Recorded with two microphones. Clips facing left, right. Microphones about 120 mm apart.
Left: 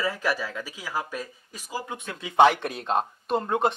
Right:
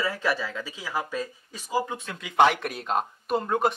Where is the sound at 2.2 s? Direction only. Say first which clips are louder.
Left 2 dB; 25° left (ahead or behind).